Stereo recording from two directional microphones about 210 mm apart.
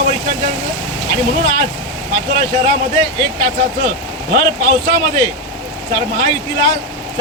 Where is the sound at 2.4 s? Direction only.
20° left (ahead or behind).